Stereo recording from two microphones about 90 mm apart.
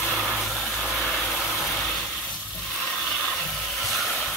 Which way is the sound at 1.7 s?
15° left (ahead or behind).